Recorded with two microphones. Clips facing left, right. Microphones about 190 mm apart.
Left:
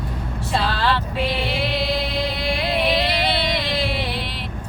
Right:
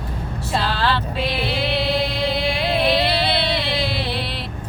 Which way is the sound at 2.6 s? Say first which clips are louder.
Right 1 dB; 15° left (ahead or behind).